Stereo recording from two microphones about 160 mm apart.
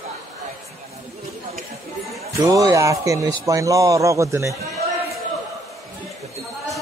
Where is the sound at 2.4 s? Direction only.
25° right (ahead or behind).